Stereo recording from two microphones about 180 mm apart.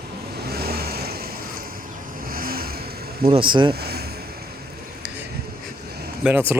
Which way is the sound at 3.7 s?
60° right (ahead or behind).